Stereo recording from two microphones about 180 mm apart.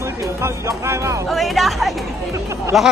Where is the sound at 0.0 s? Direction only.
15° right (ahead or behind).